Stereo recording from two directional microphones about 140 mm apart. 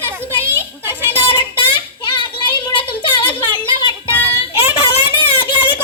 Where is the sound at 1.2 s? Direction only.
35° left (ahead or behind).